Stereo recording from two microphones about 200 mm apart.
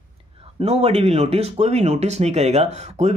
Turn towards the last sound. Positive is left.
turn(degrees=-35)  # may be behind; listen again after turning